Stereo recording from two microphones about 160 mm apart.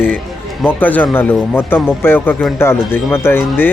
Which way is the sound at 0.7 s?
10° left (ahead or behind).